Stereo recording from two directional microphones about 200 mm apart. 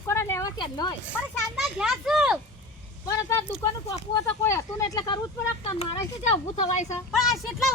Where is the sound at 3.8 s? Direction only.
15° left (ahead or behind).